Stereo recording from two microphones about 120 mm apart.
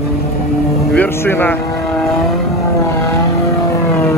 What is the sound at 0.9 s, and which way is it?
Vehicle, 15° left (ahead or behind).